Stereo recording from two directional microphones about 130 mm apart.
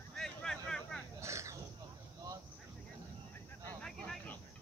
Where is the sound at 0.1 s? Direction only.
5° left (ahead or behind).